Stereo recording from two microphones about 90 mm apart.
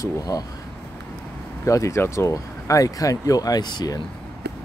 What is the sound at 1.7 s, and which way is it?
Speech, 35° left (ahead or behind).